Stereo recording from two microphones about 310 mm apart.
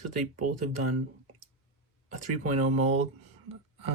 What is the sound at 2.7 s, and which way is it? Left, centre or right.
Speech, right.